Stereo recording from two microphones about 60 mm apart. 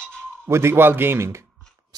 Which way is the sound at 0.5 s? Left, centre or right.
Right.